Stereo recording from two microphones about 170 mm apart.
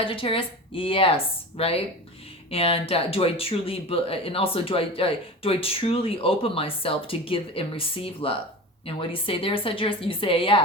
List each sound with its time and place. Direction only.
0.0 s speech: 30° left (ahead or behind)